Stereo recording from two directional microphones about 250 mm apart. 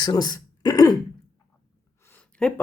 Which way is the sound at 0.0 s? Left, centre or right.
Centre.